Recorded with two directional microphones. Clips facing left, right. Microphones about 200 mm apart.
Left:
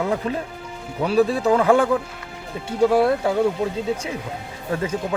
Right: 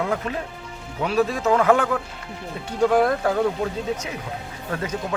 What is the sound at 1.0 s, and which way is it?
Speech, 35° left (ahead or behind).